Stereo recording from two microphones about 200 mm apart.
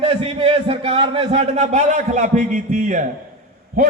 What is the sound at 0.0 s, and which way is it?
A man's voice, 30° right (ahead or behind).